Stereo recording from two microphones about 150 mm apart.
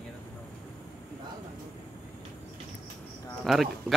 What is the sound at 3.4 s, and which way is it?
Speech, centre (ahead or behind).